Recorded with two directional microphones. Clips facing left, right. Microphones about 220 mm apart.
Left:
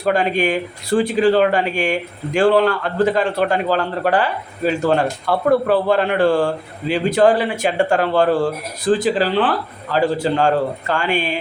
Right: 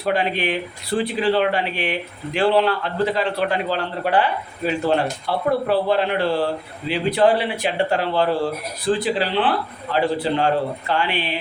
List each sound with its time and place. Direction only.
0.0 s speech: 45° left (ahead or behind)